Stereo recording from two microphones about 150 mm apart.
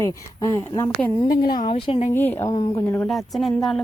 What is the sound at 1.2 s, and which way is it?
Speech, 70° left (ahead or behind).